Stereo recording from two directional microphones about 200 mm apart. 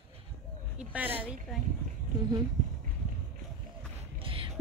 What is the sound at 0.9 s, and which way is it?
Speech, 10° right (ahead or behind).